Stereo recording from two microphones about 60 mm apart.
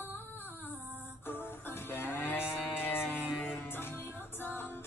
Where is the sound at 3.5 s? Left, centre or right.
Left.